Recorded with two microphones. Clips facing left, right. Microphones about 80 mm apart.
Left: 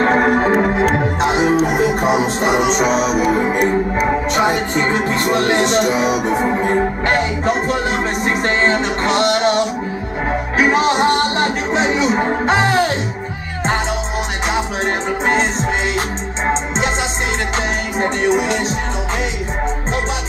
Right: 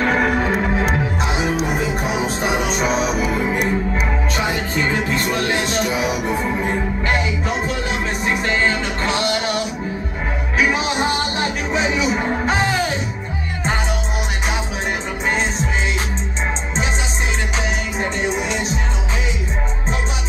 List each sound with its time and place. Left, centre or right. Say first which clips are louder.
0.0 s music: left 4 dB; left
1.2 s music: left 9 dB; left
3.2 s music: left 4 dB; left
4.5 s music: left 4 dB; left
4.9 s music: left 4 dB; left
5.9 s music: left 4 dB; left
6.5 s music: left 5 dB; left
12.6 s music: left 5 dB; left
17.9 s music: left 8 dB; left